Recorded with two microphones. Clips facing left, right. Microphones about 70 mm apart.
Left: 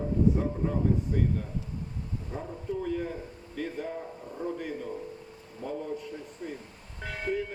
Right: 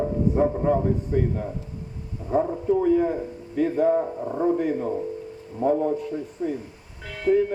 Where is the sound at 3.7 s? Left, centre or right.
Right.